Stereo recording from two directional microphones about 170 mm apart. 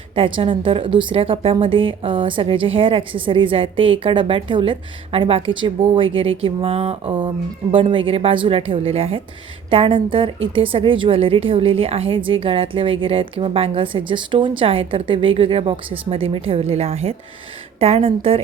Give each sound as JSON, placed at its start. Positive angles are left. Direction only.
{"t": 0.2, "sound": "a woman's voice", "side_deg": -30}